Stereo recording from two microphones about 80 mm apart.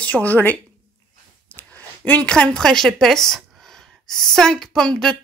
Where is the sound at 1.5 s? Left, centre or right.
Left.